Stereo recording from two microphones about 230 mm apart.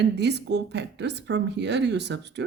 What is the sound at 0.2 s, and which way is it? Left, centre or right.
Speech, right.